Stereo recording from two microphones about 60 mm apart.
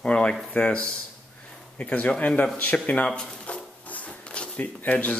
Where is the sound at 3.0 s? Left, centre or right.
Centre.